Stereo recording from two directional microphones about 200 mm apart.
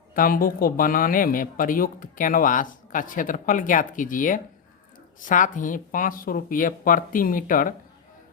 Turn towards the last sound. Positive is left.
turn(degrees=45)  # may be behind; listen again after turning